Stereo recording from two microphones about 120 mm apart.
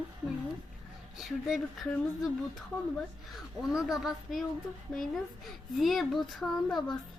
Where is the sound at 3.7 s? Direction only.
Centre (ahead or behind).